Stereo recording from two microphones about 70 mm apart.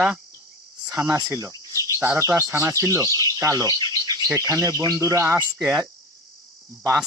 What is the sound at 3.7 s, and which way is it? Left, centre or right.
Bird, right.